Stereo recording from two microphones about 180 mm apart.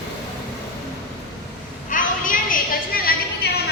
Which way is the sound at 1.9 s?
50° left (ahead or behind).